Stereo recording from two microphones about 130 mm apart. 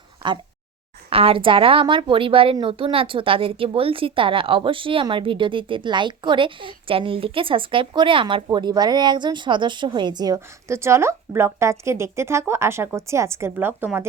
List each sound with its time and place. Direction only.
1.1 s a woman's voice: 45° right (ahead or behind); by 14.0 s 15° right (ahead or behind)